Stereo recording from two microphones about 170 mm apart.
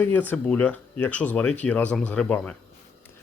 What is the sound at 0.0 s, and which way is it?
Speech, 10° left (ahead or behind).